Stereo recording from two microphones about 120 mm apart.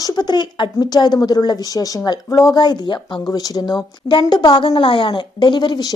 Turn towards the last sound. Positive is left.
turn(degrees=35)  # may be behind; listen again after turning